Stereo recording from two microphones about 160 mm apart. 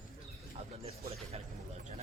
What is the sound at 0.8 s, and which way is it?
Speech, 40° right (ahead or behind).